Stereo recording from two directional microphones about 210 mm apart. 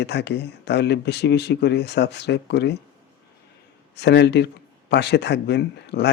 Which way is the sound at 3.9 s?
55° left (ahead or behind).